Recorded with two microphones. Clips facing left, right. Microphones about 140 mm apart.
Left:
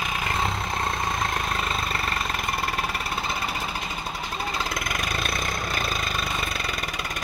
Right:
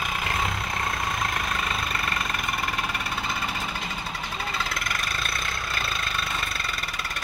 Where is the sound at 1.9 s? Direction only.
30° left (ahead or behind).